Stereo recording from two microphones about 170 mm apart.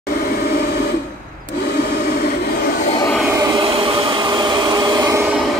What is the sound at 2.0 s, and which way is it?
Train, 65° left (ahead or behind).